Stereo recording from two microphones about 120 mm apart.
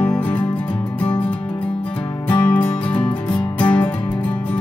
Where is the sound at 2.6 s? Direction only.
45° left (ahead or behind).